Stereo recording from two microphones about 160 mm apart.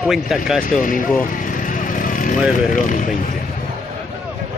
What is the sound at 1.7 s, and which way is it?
Vehicle, 55° left (ahead or behind).